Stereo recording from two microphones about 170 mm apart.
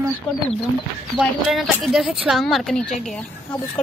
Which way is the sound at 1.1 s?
Centre (ahead or behind).